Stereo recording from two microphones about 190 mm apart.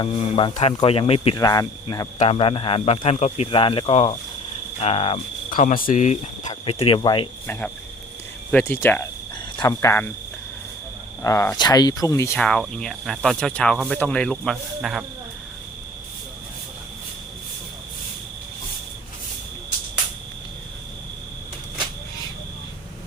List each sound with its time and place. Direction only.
0.0 s a man's voice: 25° left (ahead or behind)
1.4 s speech: 20° left (ahead or behind)
2.1 s a man's voice: 35° left (ahead or behind)
5.5 s cricket: 45° left (ahead or behind)
5.9 s a man's voice: 40° left (ahead or behind)
7.4 s speech: 10° left (ahead or behind)
11.2 s speech: 15° left (ahead or behind)
12.4 s speech: 5° left (ahead or behind)